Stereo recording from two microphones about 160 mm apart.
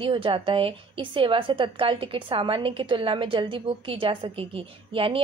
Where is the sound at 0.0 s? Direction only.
35° right (ahead or behind).